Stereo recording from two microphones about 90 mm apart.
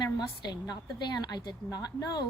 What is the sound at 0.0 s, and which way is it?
Speech, 50° left (ahead or behind).